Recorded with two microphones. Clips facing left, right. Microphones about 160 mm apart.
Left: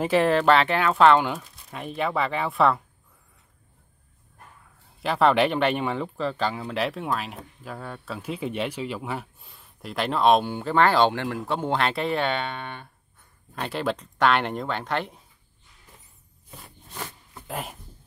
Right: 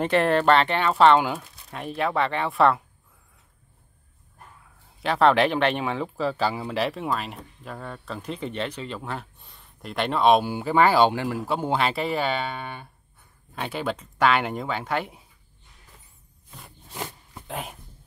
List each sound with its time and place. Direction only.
0.0 s speech: centre (ahead or behind)
5.0 s speech: centre (ahead or behind)
16.9 s a sound: 15° right (ahead or behind)
17.5 s speech: centre (ahead or behind)